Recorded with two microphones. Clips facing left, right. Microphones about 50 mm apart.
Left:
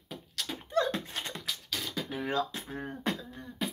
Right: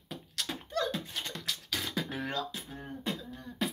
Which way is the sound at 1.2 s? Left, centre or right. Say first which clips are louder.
Left 1 dB; left.